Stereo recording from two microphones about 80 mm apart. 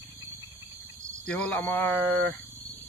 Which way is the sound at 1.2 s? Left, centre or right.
Centre.